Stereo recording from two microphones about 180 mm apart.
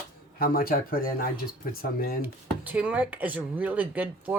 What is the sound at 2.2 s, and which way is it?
Speech, 10° right (ahead or behind).